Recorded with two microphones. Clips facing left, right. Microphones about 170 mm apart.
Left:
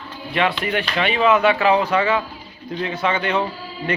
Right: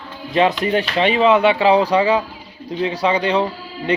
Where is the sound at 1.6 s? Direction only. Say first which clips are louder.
Right 3 dB; 35° right (ahead or behind).